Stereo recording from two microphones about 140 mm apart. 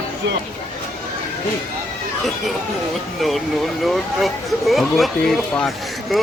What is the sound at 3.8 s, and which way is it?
Speech, centre (ahead or behind).